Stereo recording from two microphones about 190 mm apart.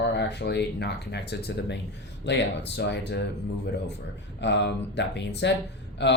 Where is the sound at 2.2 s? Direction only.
65° left (ahead or behind).